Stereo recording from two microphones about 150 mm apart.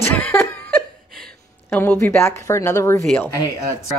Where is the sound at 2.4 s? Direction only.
20° left (ahead or behind).